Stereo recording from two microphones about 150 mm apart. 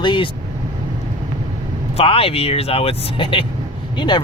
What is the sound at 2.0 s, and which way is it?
Speech, 40° left (ahead or behind).